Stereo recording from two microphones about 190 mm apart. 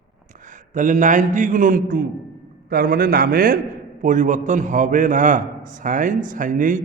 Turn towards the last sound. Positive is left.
turn(degrees=-45)  # may be behind; listen again after turning